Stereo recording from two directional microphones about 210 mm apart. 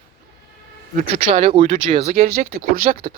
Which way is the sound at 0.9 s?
30° right (ahead or behind).